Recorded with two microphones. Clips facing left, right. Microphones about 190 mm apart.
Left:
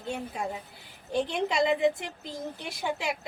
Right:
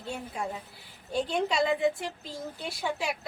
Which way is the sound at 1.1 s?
20° left (ahead or behind).